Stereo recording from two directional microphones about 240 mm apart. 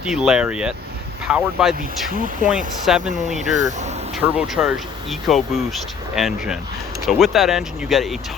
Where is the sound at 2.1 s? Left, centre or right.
Right.